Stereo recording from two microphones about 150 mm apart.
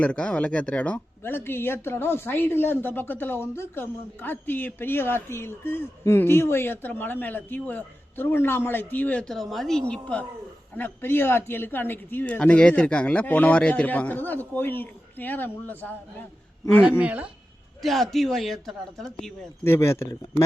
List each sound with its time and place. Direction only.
0.0 s speech: 5° left (ahead or behind)
17.0 s speech: 10° right (ahead or behind)
19.6 s speech: 15° left (ahead or behind)